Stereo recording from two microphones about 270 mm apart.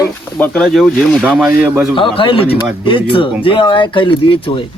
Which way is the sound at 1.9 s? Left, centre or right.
Centre.